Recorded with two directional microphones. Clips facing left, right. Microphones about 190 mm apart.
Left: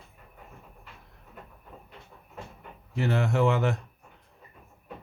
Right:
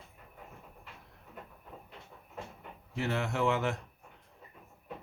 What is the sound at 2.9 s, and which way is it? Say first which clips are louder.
Speech: left 6 dB; 45° left (ahead or behind).